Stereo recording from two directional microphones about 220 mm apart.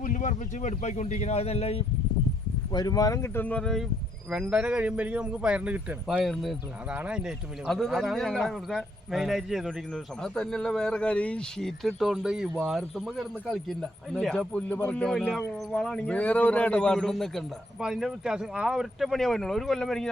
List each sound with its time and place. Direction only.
0.0 s speech: 35° left (ahead or behind)
2.7 s a man's voice: 15° left (ahead or behind)